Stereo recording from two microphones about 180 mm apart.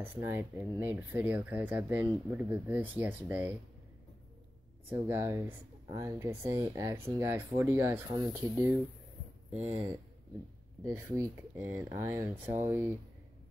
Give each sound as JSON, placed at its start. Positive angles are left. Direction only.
{"t": 0.0, "sound": "speech", "side_deg": -10}
{"t": 4.8, "sound": "speech", "side_deg": -10}
{"t": 9.5, "sound": "speech", "side_deg": -40}
{"t": 10.9, "sound": "speech", "side_deg": -15}